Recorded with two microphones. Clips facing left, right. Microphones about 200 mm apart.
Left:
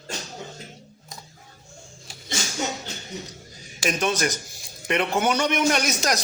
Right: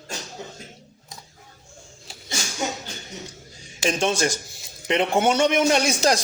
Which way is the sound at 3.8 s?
25° right (ahead or behind).